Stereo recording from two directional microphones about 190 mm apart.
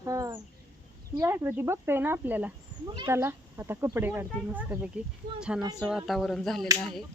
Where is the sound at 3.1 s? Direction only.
10° right (ahead or behind).